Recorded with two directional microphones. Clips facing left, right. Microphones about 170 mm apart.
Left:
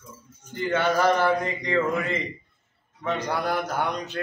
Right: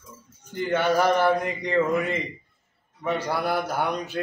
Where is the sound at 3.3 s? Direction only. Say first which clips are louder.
Even; 10° right (ahead or behind).